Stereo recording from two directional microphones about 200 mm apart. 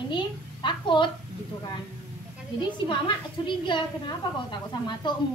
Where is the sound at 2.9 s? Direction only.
25° left (ahead or behind).